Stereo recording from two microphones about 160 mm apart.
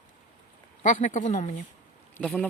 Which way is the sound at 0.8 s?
55° left (ahead or behind).